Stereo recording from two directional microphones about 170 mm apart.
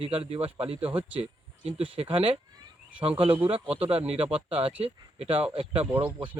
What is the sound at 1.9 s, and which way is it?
Speech, 35° right (ahead or behind).